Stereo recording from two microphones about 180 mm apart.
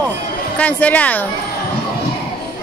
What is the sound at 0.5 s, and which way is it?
Speech, 10° left (ahead or behind).